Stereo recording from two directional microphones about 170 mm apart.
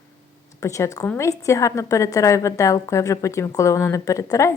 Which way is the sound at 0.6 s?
20° left (ahead or behind).